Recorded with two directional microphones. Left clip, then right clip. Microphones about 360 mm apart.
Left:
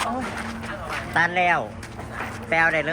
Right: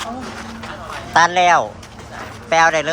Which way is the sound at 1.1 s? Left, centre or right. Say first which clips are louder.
Right 8 dB; centre.